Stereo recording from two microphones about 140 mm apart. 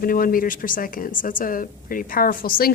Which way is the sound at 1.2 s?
75° left (ahead or behind).